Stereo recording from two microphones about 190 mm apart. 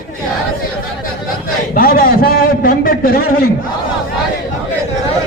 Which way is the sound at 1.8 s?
50° left (ahead or behind).